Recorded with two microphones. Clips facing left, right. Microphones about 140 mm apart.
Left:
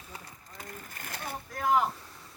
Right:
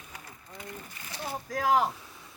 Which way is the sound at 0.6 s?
45° left (ahead or behind).